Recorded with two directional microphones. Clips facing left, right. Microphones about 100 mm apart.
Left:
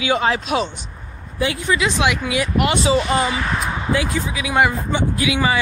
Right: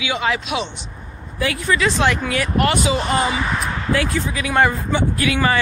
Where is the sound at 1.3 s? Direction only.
20° left (ahead or behind).